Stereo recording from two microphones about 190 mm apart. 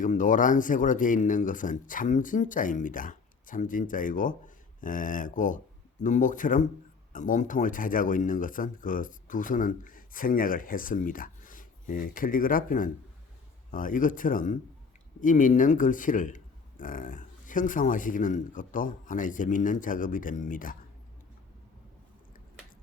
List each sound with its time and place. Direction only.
0.0 s speech: 45° left (ahead or behind)